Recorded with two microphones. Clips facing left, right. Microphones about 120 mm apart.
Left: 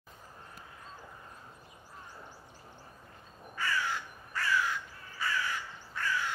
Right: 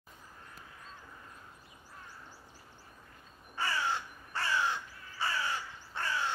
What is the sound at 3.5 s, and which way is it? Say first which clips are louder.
Crow: even; 30° right (ahead or behind).